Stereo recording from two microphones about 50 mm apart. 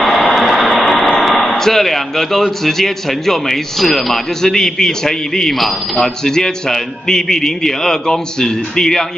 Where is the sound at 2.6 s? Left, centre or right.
Centre.